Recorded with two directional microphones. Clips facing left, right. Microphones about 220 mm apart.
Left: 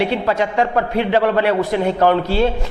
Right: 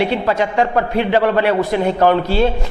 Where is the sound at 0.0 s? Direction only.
15° right (ahead or behind).